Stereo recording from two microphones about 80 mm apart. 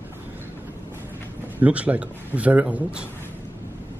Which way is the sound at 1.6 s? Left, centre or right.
Centre.